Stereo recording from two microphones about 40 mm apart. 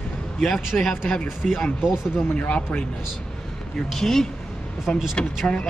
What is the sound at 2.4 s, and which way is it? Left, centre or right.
Speech, left.